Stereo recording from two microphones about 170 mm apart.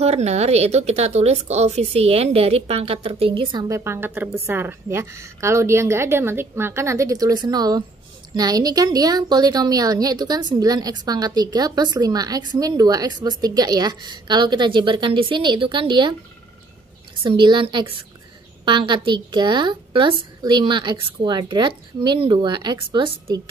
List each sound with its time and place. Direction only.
0.0 s a woman's voice: 40° right (ahead or behind)
3.6 s a woman's voice: 15° right (ahead or behind)
17.2 s a woman's voice: 30° right (ahead or behind)